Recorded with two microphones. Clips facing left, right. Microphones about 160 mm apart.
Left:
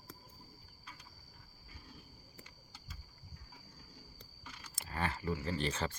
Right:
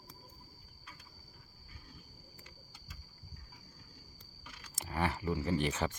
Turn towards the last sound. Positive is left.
turn(degrees=-15)  # may be behind; listen again after turning